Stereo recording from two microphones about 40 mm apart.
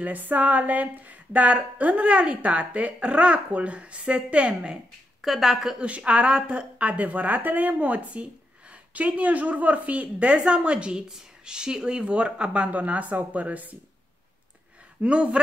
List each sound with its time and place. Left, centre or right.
0.0 s speech: right
5.2 s speech: centre
5.8 s speech: right
15.0 s speech: right